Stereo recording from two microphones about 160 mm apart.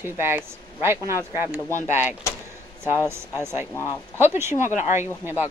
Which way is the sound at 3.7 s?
20° left (ahead or behind).